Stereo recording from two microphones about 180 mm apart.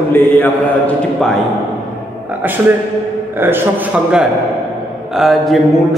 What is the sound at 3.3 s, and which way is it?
A man's voice, 10° right (ahead or behind).